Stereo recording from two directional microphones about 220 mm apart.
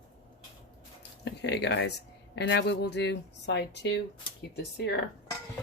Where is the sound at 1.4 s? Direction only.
50° left (ahead or behind).